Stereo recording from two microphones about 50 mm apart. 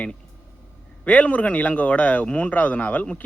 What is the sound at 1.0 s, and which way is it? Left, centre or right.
Speech, left.